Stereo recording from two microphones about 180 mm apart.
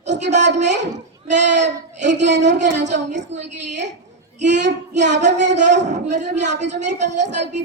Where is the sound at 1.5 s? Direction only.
40° right (ahead or behind).